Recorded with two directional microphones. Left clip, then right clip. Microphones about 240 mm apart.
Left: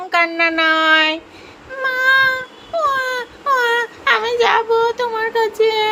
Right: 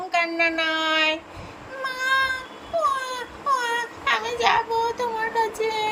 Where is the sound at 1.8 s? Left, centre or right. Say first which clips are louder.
Left 9 dB; centre.